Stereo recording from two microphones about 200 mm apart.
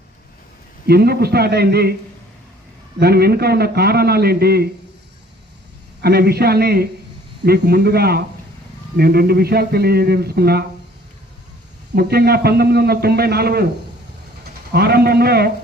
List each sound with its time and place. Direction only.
0.9 s a man's voice: 50° right (ahead or behind)
3.0 s a man's voice: 50° right (ahead or behind)
6.0 s a man's voice: 55° right (ahead or behind)
11.9 s a man's voice: 50° right (ahead or behind)
14.7 s a man's voice: 50° right (ahead or behind)